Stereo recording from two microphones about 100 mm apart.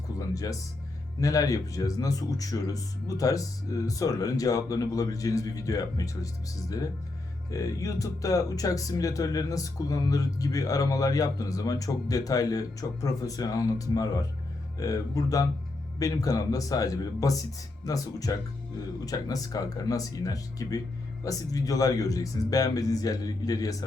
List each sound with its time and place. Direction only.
0.2 s speech: 35° left (ahead or behind)